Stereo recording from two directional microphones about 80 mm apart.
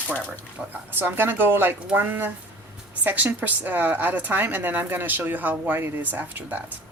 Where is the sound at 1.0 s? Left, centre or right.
Right.